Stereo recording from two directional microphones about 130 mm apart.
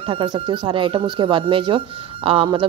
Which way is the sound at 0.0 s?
40° right (ahead or behind).